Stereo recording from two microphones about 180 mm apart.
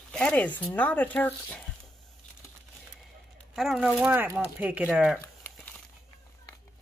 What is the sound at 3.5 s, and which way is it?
Speech, 5° right (ahead or behind).